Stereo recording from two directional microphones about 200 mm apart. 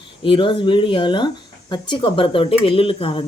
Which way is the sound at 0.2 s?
25° left (ahead or behind).